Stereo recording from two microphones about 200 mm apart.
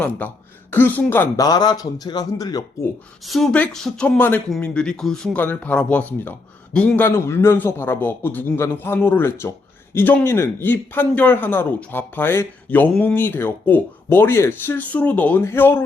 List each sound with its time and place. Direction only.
0.0 s speech: 10° left (ahead or behind)
3.2 s speech: centre (ahead or behind)